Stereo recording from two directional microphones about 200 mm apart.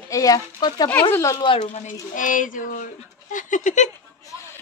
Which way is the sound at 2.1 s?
40° left (ahead or behind).